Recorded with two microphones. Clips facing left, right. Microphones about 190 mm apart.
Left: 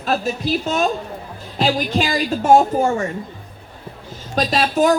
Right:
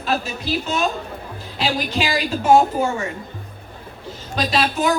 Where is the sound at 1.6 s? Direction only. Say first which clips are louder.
Left 4 dB; 45° left (ahead or behind).